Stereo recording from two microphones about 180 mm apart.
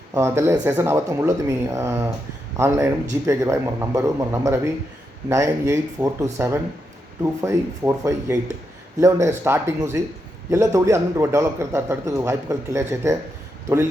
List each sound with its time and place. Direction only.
0.1 s a man's voice: 15° right (ahead or behind)